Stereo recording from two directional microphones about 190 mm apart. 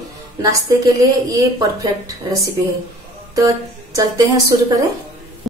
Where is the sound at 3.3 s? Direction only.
20° right (ahead or behind).